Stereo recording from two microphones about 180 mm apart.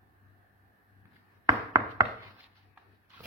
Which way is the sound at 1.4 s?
20° right (ahead or behind).